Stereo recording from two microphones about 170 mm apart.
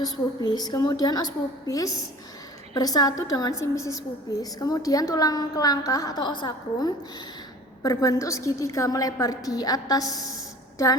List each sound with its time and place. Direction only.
0.0 s a woman's voice: 25° left (ahead or behind)